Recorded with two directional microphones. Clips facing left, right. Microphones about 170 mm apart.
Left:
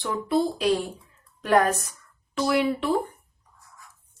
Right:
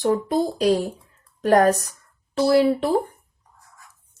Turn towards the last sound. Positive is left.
turn(degrees=-35)  # may be behind; listen again after turning